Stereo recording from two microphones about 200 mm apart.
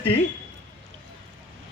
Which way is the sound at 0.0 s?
30° left (ahead or behind).